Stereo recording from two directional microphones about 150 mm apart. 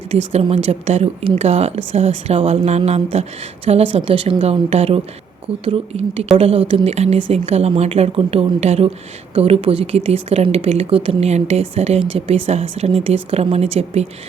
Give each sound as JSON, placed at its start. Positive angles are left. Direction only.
{"t": 0.1, "sound": "a woman's voice", "side_deg": -45}